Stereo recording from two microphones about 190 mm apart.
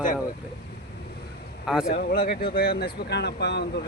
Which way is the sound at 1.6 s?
Centre (ahead or behind).